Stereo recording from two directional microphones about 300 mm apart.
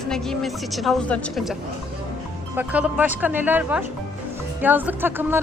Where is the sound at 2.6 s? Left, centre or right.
Centre.